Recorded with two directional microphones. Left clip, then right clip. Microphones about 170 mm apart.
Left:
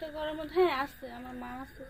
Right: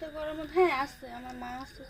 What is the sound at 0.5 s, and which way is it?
A woman's voice, 10° right (ahead or behind).